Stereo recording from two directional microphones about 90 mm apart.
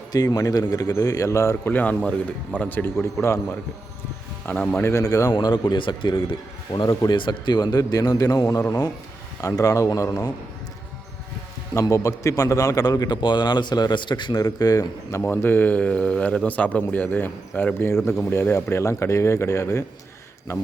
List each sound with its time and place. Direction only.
0.1 s a man's voice: 45° left (ahead or behind)
1.6 s speech: 20° left (ahead or behind)
3.0 s speech: 30° left (ahead or behind)
4.7 s speech: 30° left (ahead or behind)
5.3 s a man's voice: 60° left (ahead or behind)
6.7 s a man's voice: 50° left (ahead or behind)
11.7 s a man's voice: 40° left (ahead or behind)
15.2 s a man's voice: 25° left (ahead or behind)